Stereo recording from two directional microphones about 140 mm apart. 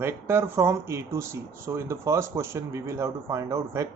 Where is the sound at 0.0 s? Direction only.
15° right (ahead or behind).